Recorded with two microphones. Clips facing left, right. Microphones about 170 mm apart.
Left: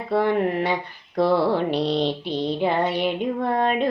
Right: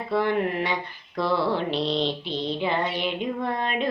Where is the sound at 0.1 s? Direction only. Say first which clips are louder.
Left 3 dB; 50° left (ahead or behind).